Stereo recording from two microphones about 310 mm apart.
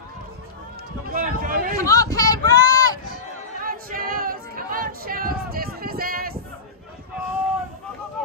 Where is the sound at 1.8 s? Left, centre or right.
Centre.